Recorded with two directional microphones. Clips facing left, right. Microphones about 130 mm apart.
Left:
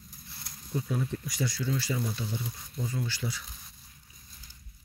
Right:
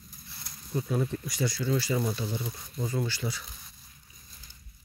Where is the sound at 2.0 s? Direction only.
50° right (ahead or behind).